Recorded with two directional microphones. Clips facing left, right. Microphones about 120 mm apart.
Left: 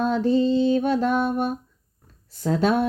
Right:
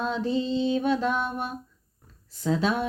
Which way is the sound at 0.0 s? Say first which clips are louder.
Left 7 dB; 45° left (ahead or behind).